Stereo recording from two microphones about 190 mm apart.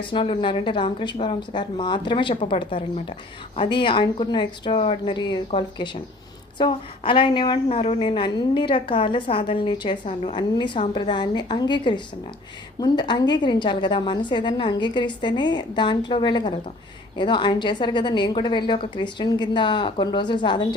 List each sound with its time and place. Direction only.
0.0 s a woman's voice: 25° left (ahead or behind)